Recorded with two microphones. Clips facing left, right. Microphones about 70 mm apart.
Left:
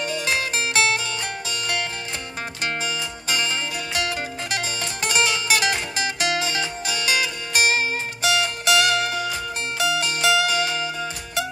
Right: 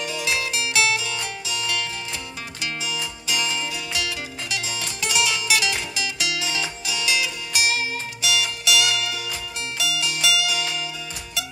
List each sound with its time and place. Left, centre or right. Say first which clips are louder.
0.0 s music: left 2 dB; left